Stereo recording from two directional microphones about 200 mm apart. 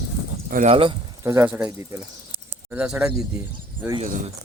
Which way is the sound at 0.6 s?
25° right (ahead or behind).